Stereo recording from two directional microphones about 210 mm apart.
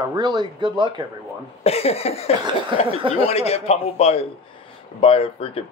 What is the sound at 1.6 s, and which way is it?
Speech, 30° left (ahead or behind).